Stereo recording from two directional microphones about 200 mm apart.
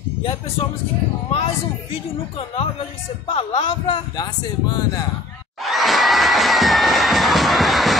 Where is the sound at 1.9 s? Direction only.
30° left (ahead or behind).